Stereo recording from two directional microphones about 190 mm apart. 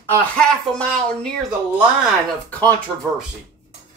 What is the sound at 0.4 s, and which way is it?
Speech, 5° left (ahead or behind).